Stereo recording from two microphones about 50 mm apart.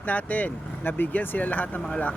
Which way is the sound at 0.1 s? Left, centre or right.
Left.